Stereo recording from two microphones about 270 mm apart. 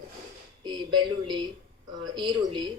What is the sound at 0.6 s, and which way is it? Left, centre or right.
A woman's voice, centre.